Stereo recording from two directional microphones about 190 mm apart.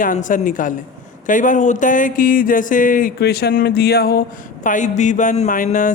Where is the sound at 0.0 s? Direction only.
45° left (ahead or behind).